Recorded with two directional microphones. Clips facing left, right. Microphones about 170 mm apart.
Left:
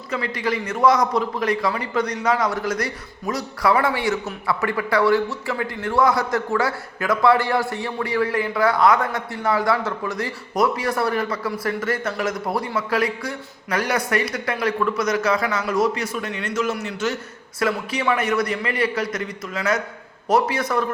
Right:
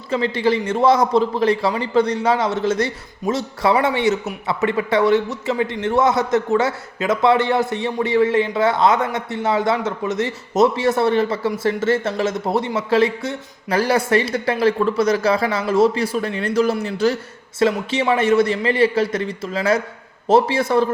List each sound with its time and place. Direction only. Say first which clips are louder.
0.1 s a man's voice: right 6 dB; 30° right (ahead or behind)